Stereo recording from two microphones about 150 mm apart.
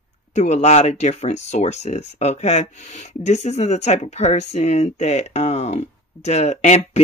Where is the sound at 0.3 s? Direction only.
50° left (ahead or behind).